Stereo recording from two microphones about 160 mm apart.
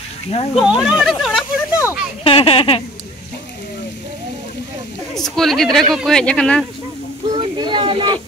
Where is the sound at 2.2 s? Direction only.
35° left (ahead or behind).